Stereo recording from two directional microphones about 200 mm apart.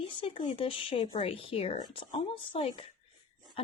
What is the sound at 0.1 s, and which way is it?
Speech, 25° left (ahead or behind).